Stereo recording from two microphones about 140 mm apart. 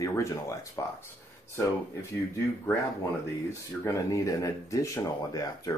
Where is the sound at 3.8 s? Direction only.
20° left (ahead or behind).